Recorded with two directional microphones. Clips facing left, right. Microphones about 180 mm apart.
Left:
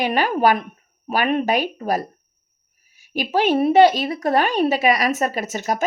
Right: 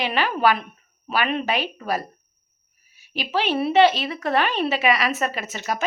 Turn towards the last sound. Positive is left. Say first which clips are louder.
# left 4 dB
turn(degrees=45)  # may be behind; listen again after turning